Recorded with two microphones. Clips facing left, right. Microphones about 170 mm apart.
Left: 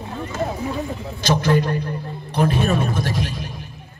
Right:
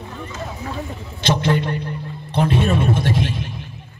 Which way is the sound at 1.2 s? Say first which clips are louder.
Left 1 dB; 25° right (ahead or behind).